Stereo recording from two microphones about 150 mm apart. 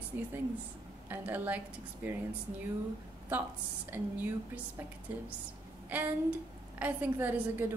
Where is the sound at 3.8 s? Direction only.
10° right (ahead or behind).